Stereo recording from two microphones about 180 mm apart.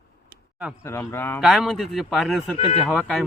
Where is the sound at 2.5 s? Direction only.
30° left (ahead or behind).